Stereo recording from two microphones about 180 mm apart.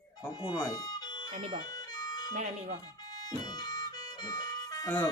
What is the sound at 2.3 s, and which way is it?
Speech, 40° right (ahead or behind).